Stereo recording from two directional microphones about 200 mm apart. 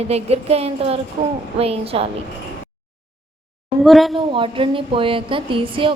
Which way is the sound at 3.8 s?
Centre (ahead or behind).